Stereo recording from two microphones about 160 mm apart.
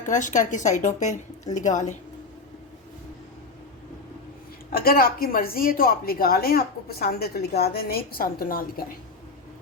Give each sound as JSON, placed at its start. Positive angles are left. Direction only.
{"t": 0.0, "sound": "a woman's voice", "side_deg": 50}
{"t": 4.7, "sound": "a woman's voice", "side_deg": 65}